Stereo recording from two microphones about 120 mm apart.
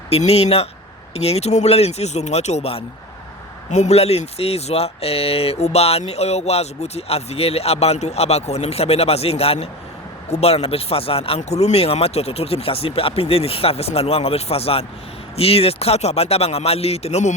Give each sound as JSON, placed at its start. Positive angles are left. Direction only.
{"t": 0.1, "sound": "speech", "side_deg": 60}
{"t": 3.7, "sound": "speech", "side_deg": 70}
{"t": 11.3, "sound": "speech", "side_deg": 65}